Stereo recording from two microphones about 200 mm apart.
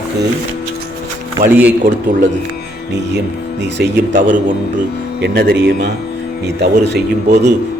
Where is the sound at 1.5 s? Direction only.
10° right (ahead or behind).